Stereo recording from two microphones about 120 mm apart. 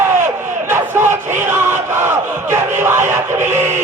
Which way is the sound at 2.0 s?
20° right (ahead or behind).